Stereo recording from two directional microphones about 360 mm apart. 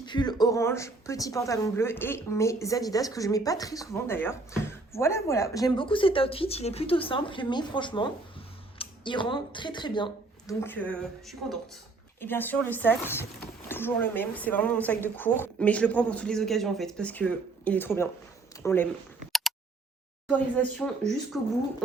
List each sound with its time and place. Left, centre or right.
0.0 s a woman's voice: centre
20.2 s speech: centre